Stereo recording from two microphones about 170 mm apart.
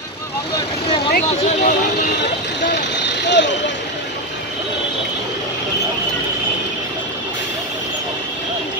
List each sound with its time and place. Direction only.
1.1 s speech: 55° left (ahead or behind)
2.7 s vehicle: 90° left